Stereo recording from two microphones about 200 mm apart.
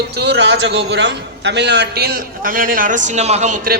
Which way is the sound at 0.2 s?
60° right (ahead or behind).